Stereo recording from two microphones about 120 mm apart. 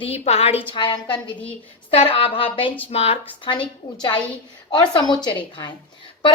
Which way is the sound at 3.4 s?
40° left (ahead or behind).